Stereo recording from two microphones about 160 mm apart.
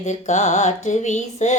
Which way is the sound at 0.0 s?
45° left (ahead or behind).